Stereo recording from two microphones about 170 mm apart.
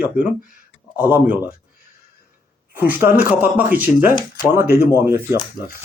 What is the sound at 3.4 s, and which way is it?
Speech, 10° right (ahead or behind).